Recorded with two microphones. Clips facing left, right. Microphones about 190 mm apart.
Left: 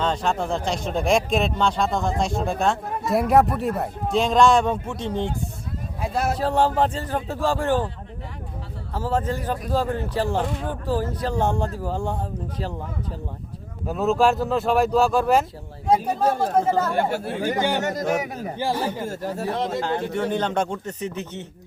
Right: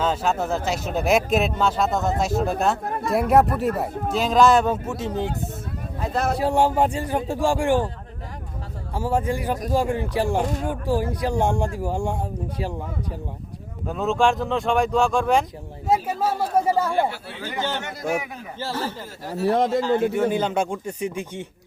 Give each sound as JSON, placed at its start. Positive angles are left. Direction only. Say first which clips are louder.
{"t": 0.0, "sound": "speech", "louder": "right 1 dB", "side_deg": -5}
{"t": 6.0, "sound": "speech", "louder": "even", "side_deg": 10}
{"t": 6.3, "sound": "speech", "louder": "right 1 dB", "side_deg": -10}
{"t": 9.0, "sound": "speech", "louder": "right 1 dB", "side_deg": -10}
{"t": 10.4, "sound": "speech", "louder": "right 2 dB", "side_deg": -40}
{"t": 10.7, "sound": "speech", "louder": "right 2 dB", "side_deg": -10}
{"t": 13.8, "sound": "speech", "louder": "left 1 dB", "side_deg": 5}
{"t": 17.0, "sound": "speech", "louder": "left 1 dB", "side_deg": 45}
{"t": 18.6, "sound": "speech", "louder": "left 3 dB", "side_deg": 15}
{"t": 19.0, "sound": "speech", "louder": "left 1 dB", "side_deg": 50}
{"t": 19.5, "sound": "a man's voice", "louder": "right 8 dB", "side_deg": -50}
{"t": 20.0, "sound": "speech", "louder": "right 3 dB", "side_deg": -10}